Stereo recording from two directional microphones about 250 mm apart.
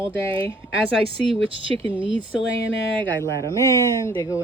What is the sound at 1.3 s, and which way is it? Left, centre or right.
Speech, right.